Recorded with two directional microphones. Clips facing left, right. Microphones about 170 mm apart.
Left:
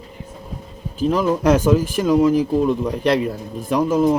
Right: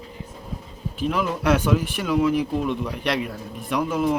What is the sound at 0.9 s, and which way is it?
A man's voice, 40° left (ahead or behind).